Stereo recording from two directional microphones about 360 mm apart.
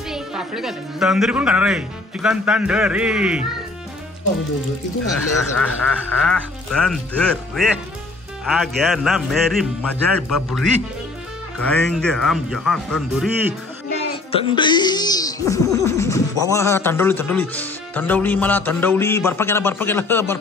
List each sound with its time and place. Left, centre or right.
0.1 s a woman's voice: centre
5.6 s a woman's voice: centre
14.3 s speech: centre